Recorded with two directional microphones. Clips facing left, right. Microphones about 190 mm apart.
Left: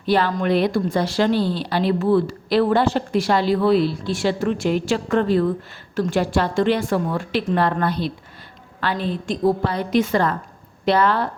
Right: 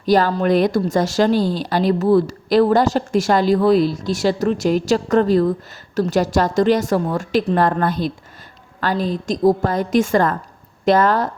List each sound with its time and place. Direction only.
0.0 s a woman's voice: 40° right (ahead or behind)